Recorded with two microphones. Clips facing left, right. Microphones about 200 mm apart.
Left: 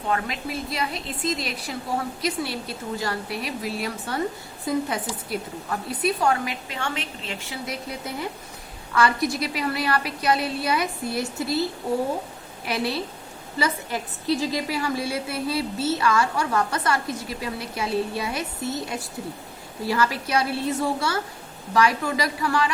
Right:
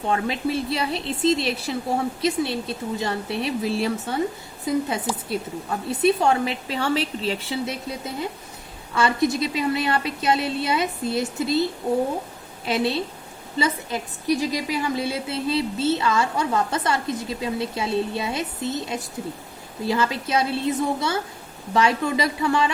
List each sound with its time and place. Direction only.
0.1 s a woman's voice: 30° right (ahead or behind)
12.6 s a woman's voice: 25° right (ahead or behind)